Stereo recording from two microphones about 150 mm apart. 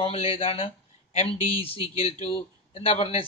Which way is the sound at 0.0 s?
40° left (ahead or behind).